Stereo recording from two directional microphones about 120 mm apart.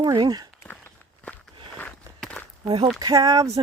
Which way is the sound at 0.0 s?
40° right (ahead or behind).